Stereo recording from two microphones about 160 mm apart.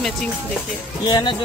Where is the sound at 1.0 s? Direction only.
25° left (ahead or behind).